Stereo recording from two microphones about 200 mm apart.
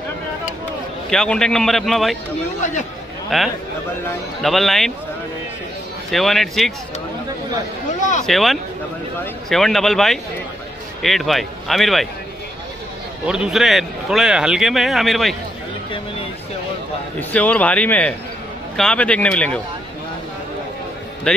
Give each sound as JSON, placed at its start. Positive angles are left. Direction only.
{"t": 1.1, "sound": "a man's voice", "side_deg": 5}
{"t": 3.3, "sound": "a man's voice", "side_deg": 0}
{"t": 6.0, "sound": "a man's voice", "side_deg": 0}
{"t": 8.0, "sound": "speech", "side_deg": 40}
{"t": 8.3, "sound": "a man's voice", "side_deg": 0}
{"t": 13.2, "sound": "a man's voice", "side_deg": -5}
{"t": 17.2, "sound": "a man's voice", "side_deg": 5}